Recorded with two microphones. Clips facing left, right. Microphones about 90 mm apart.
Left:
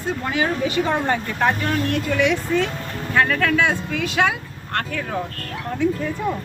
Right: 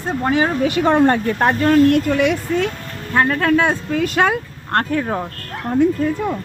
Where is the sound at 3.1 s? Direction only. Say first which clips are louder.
Right 3 dB; 40° right (ahead or behind).